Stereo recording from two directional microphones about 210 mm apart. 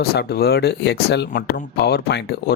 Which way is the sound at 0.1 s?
50° left (ahead or behind).